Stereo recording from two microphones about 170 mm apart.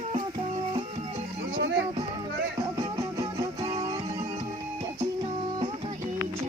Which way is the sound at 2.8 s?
20° right (ahead or behind).